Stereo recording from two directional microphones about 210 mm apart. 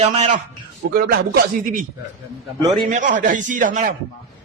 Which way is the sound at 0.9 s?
45° right (ahead or behind).